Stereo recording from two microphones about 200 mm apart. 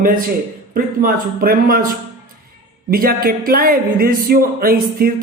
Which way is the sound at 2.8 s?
45° right (ahead or behind).